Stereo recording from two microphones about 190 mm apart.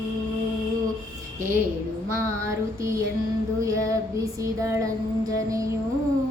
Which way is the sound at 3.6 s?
15° right (ahead or behind).